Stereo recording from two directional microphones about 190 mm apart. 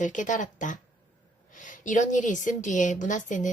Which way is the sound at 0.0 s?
40° left (ahead or behind).